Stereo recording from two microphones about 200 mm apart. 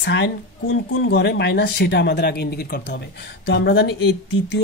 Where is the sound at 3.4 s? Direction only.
65° left (ahead or behind).